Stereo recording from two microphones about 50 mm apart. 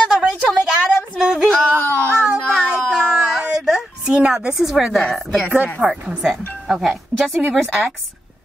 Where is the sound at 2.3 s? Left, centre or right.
Centre.